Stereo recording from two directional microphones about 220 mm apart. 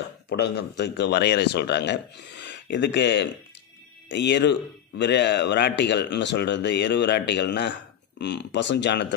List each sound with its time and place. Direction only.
0.3 s a man's voice: 50° left (ahead or behind)